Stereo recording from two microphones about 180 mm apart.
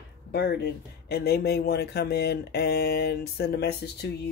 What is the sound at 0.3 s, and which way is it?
Speech, 65° left (ahead or behind).